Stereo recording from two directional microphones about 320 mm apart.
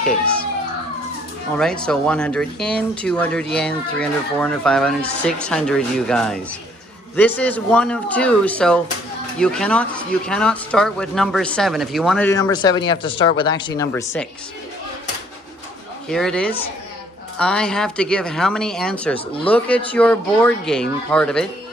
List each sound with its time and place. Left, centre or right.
0.0 s speech: centre
1.5 s speech: centre
16.1 s speech: centre